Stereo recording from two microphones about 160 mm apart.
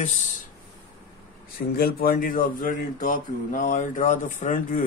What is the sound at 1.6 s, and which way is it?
Speech, 70° left (ahead or behind).